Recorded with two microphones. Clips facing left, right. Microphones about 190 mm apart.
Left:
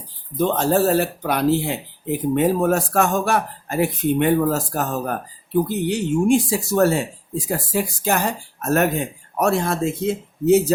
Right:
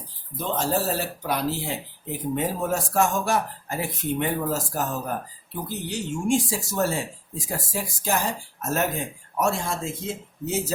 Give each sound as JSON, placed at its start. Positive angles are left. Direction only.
{"t": 0.3, "sound": "speech", "side_deg": 60}